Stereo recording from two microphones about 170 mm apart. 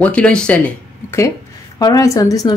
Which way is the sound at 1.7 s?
20° left (ahead or behind).